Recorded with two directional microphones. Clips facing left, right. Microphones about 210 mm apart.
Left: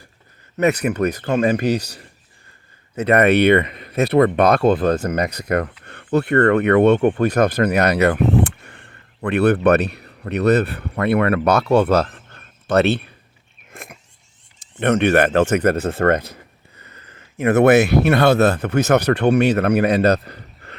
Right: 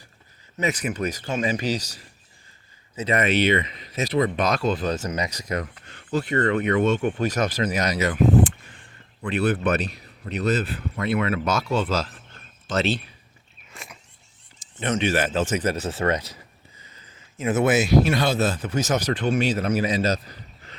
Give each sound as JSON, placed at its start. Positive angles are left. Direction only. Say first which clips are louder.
{"t": 0.6, "sound": "speech", "louder": "left 8 dB", "side_deg": 60}
{"t": 13.7, "sound": "a sound", "louder": "left 5 dB", "side_deg": 55}
{"t": 14.8, "sound": "speech", "louder": "left 8 dB", "side_deg": 60}